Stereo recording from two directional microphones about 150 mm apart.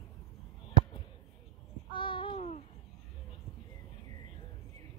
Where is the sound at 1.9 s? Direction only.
35° left (ahead or behind).